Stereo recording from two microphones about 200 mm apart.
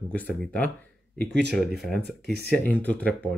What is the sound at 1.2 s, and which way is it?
Speech, 55° right (ahead or behind).